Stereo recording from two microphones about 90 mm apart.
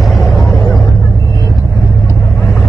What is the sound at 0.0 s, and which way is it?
Vehicle, centre (ahead or behind).